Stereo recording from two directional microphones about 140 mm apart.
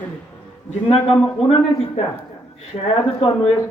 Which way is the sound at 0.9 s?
40° left (ahead or behind).